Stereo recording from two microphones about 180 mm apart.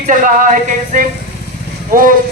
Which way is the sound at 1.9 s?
50° right (ahead or behind).